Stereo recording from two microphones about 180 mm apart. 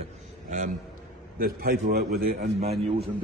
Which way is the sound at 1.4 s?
55° right (ahead or behind).